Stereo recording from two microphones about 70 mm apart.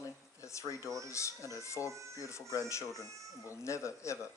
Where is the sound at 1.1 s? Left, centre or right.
Left.